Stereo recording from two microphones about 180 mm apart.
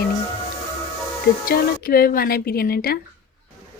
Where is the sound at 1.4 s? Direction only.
55° left (ahead or behind).